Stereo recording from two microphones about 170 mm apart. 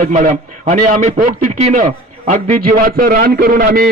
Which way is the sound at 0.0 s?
50° right (ahead or behind).